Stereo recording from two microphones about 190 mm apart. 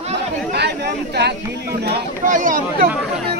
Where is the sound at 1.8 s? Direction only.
45° right (ahead or behind).